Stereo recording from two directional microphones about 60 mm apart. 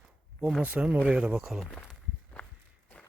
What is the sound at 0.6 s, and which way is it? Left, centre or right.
Speech, right.